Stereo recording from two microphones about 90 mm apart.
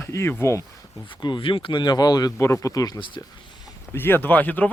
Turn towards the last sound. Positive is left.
turn(degrees=20)  # may be behind; listen again after turning